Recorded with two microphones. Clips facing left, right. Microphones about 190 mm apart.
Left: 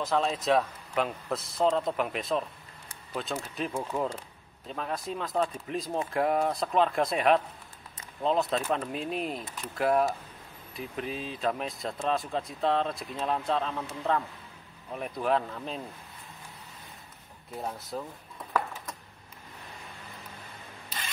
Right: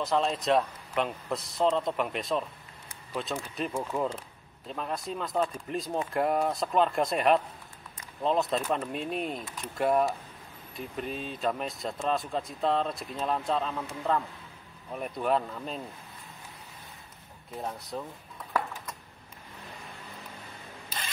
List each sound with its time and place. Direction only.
0.0 s speech: centre (ahead or behind)
17.6 s speech: centre (ahead or behind)